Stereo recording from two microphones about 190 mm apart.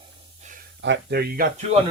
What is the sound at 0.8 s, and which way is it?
Speech, 65° right (ahead or behind).